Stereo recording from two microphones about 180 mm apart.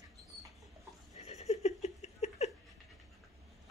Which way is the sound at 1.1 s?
35° left (ahead or behind).